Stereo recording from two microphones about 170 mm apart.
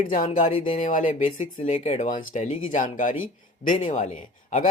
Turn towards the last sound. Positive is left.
turn(degrees=45)  # may be behind; listen again after turning